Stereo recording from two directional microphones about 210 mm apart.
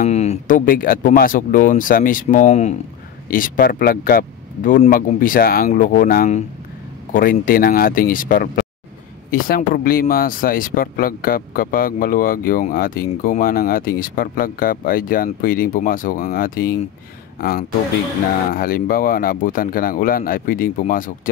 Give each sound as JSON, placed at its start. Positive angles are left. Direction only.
{"t": 0.0, "sound": "speech", "side_deg": 30}